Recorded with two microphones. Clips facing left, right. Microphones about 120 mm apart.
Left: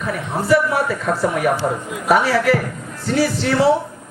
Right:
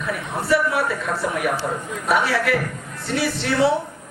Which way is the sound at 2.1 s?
40° left (ahead or behind).